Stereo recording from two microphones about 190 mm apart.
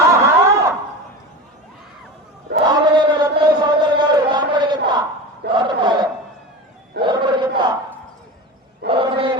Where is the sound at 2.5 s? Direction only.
60° right (ahead or behind).